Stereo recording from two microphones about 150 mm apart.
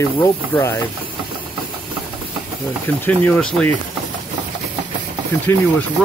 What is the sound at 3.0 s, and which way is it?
Speech, 10° left (ahead or behind).